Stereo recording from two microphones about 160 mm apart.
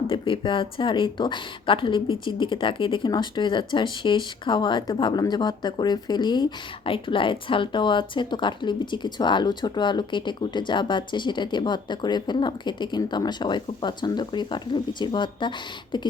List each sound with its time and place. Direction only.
0.1 s speech: 35° left (ahead or behind)